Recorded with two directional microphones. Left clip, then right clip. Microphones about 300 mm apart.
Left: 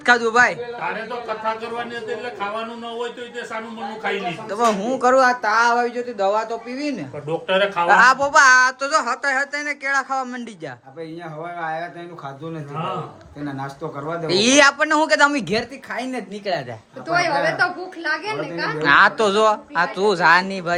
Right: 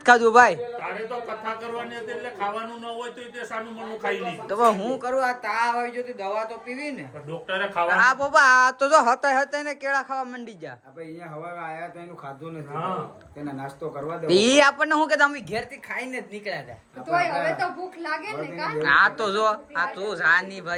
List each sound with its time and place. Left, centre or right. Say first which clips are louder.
0.0 s a man's voice: even; centre
4.4 s a woman's voice: even; centre
5.0 s a woman's voice: left 11 dB; left; by 10.4 s centre
14.3 s a woman's voice: left 3 dB; centre
15.5 s a woman's voice: left 7 dB; left
16.0 s speech: left 5 dB; centre
17.1 s a woman's voice: left 4 dB; left
18.8 s a woman's voice: left 5 dB; centre